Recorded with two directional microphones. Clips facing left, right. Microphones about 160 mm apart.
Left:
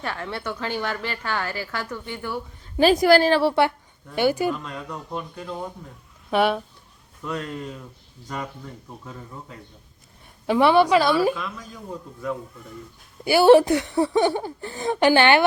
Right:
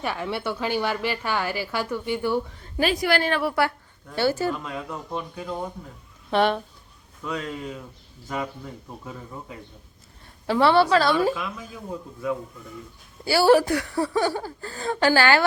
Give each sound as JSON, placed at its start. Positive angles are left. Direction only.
{"t": 0.0, "sound": "a woman's voice", "side_deg": -10}
{"t": 2.8, "sound": "a woman's voice", "side_deg": 40}
{"t": 4.1, "sound": "a woman's voice", "side_deg": 15}
{"t": 4.6, "sound": "speech", "side_deg": -5}
{"t": 6.3, "sound": "a woman's voice", "side_deg": 10}
{"t": 10.4, "sound": "a woman's voice", "side_deg": 15}
{"t": 13.2, "sound": "speech", "side_deg": 20}